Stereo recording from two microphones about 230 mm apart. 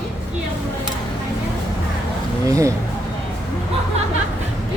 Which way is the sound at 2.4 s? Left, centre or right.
Centre.